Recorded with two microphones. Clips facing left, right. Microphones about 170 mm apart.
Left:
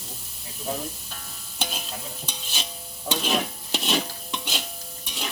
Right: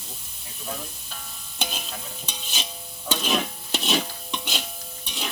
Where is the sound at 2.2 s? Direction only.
5° right (ahead or behind).